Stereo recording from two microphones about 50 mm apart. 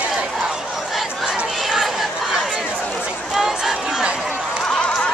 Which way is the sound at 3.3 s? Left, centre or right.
Centre.